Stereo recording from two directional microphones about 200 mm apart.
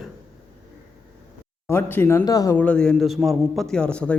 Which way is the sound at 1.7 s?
10° left (ahead or behind).